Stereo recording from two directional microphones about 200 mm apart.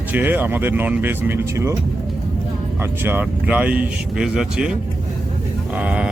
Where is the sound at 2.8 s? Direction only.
10° right (ahead or behind).